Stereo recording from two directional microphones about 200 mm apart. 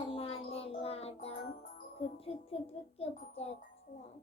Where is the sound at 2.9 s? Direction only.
30° left (ahead or behind).